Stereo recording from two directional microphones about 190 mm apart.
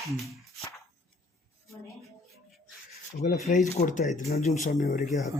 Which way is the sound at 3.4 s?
40° left (ahead or behind).